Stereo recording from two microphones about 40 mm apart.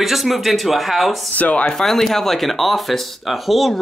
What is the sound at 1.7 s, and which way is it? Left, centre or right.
Speech, centre.